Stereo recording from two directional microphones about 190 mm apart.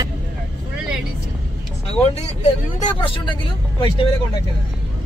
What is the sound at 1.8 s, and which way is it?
Speech, 30° left (ahead or behind).